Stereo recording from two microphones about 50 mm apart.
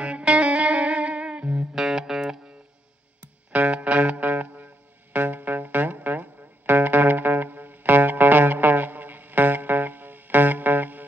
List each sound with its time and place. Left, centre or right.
0.0 s music: right
1.8 s music: centre
3.5 s music: right